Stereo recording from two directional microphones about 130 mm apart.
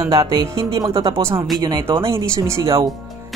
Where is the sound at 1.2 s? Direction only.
20° right (ahead or behind).